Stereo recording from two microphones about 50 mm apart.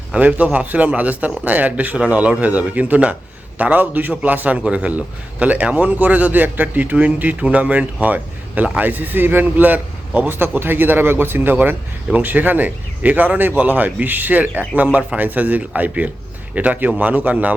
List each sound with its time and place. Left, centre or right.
0.1 s a man's voice: right